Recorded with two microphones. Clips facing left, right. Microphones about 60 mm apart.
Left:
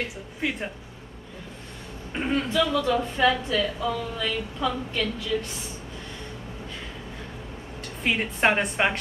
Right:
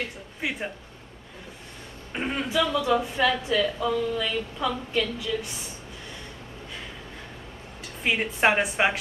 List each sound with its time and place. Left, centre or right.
0.4 s speech: centre
2.1 s a man's voice: centre
8.0 s a woman's voice: centre